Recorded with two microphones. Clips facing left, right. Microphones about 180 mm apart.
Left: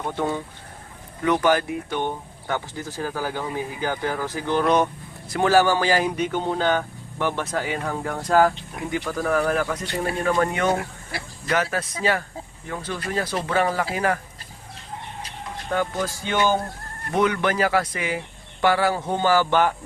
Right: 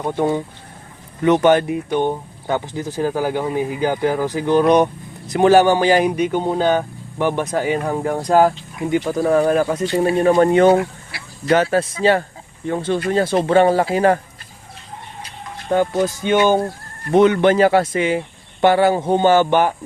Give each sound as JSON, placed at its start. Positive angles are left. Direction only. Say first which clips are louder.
{"t": 0.0, "sound": "speech", "louder": "right 7 dB", "side_deg": -15}
{"t": 16.0, "sound": "speech", "louder": "right 8 dB", "side_deg": -20}